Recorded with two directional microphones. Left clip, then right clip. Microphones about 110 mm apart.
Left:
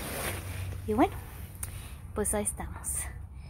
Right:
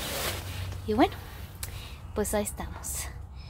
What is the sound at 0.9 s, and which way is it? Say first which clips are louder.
A woman's voice: right 2 dB; 5° right (ahead or behind).